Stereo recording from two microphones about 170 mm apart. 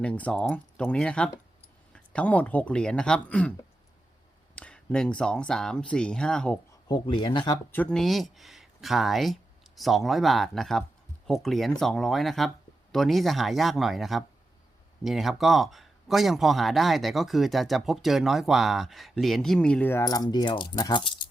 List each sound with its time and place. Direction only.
0.0 s speech: 5° left (ahead or behind)
4.5 s speech: 5° left (ahead or behind)
6.8 s speech: 30° left (ahead or behind)
7.7 s speech: 5° left (ahead or behind); by 21.1 s 25° left (ahead or behind)